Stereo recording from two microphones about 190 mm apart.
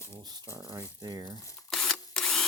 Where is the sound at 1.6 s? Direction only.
Centre (ahead or behind).